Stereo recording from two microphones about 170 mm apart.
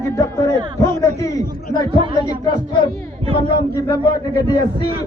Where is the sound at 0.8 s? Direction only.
15° left (ahead or behind).